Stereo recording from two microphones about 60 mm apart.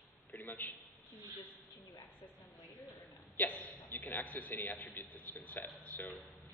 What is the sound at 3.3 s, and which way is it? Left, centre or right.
A man's voice, left.